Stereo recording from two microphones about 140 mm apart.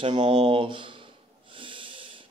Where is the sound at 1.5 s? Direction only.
40° right (ahead or behind).